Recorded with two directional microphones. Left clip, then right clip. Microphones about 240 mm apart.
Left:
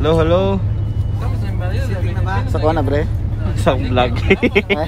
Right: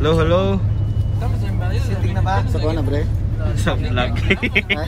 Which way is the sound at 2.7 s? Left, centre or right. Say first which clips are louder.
Left 6 dB; centre.